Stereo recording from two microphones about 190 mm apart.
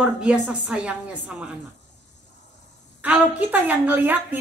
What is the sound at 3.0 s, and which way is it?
A woman's voice, 10° right (ahead or behind).